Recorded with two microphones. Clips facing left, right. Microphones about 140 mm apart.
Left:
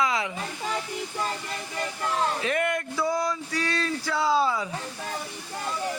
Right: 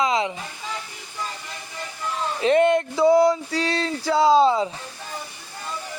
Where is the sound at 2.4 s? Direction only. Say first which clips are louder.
Right 9 dB; 25° right (ahead or behind).